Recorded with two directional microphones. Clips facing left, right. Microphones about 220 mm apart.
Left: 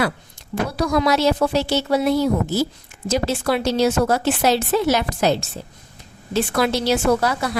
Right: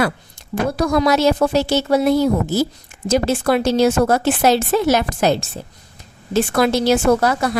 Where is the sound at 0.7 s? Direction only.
50° right (ahead or behind).